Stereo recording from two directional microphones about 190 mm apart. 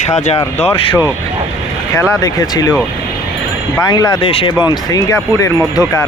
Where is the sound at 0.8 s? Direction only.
25° left (ahead or behind).